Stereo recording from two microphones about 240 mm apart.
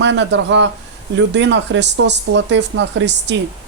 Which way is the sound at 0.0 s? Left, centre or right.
Right.